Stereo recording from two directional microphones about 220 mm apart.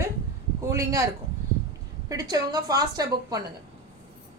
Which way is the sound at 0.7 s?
15° right (ahead or behind).